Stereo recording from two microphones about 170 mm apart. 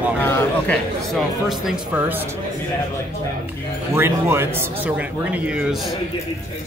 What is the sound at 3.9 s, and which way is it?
Speech, 15° right (ahead or behind).